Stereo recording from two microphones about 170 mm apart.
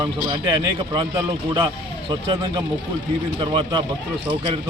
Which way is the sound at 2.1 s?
30° right (ahead or behind).